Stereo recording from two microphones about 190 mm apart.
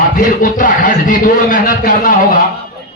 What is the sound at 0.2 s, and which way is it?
A man's voice, 45° left (ahead or behind).